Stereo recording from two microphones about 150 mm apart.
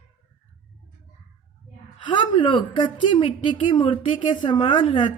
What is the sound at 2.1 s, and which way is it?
A woman's voice, 35° left (ahead or behind).